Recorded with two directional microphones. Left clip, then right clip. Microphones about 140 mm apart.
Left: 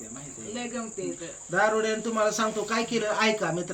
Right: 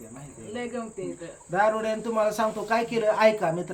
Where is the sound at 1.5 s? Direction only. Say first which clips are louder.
Right 1 dB; 25° right (ahead or behind).